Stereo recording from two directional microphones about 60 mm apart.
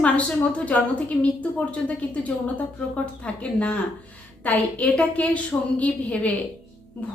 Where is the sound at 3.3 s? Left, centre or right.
Centre.